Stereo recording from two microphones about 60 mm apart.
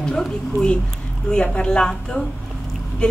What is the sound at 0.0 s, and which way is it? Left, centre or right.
A woman's voice, centre.